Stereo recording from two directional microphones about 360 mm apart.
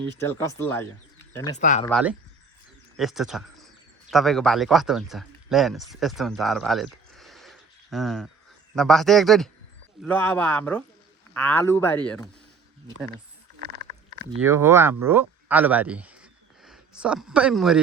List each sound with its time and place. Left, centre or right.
0.2 s speech: centre
1.6 s speech: centre
1.9 s speech: centre
13.6 s a sound: right
14.4 s speech: centre